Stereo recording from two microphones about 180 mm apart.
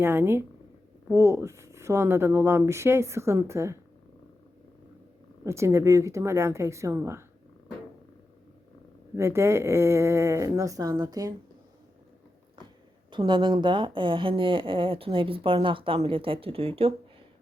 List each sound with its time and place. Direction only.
0.0 s speech: 15° right (ahead or behind)
5.4 s speech: 15° right (ahead or behind)
9.1 s speech: 15° right (ahead or behind)
13.1 s speech: 25° right (ahead or behind)